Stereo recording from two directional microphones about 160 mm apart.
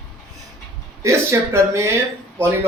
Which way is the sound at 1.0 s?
15° right (ahead or behind).